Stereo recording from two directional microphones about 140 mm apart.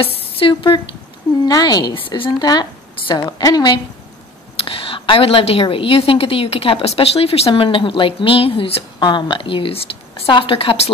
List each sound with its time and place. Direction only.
0.0 s a woman's voice: 40° left (ahead or behind)
4.6 s a woman's voice: 40° left (ahead or behind)